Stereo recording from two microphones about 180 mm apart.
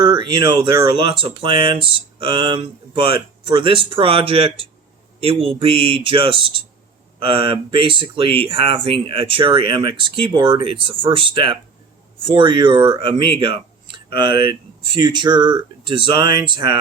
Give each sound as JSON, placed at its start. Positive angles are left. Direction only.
{"t": 0.0, "sound": "speech", "side_deg": -25}